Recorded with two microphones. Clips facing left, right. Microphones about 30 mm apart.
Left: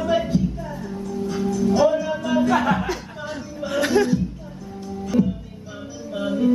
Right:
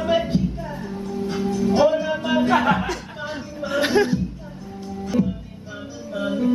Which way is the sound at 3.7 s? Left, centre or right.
Right.